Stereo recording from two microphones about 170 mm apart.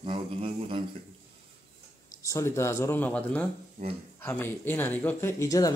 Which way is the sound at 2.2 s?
15° left (ahead or behind).